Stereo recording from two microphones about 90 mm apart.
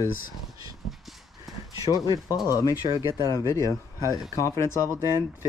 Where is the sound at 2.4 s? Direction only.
40° left (ahead or behind).